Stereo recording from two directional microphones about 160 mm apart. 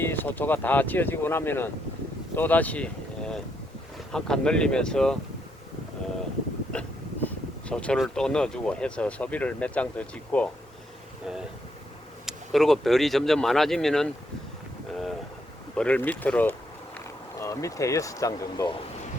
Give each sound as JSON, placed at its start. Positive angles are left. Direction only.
{"t": 0.0, "sound": "speech", "side_deg": 10}
{"t": 6.7, "sound": "speech", "side_deg": 10}
{"t": 12.2, "sound": "speech", "side_deg": 0}
{"t": 15.7, "sound": "speech", "side_deg": 5}